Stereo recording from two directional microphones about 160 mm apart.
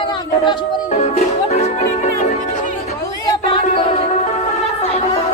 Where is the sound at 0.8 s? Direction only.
45° left (ahead or behind).